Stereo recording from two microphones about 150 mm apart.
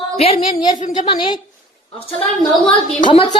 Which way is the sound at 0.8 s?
45° left (ahead or behind).